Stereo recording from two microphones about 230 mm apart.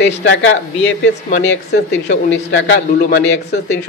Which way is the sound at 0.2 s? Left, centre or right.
Left.